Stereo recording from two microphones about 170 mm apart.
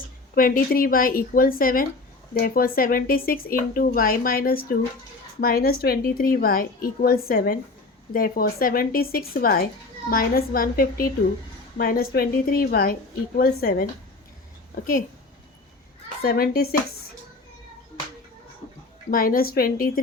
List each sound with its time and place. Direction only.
0.3 s speech: 55° left (ahead or behind)
16.2 s speech: 60° left (ahead or behind)
19.1 s speech: 55° left (ahead or behind)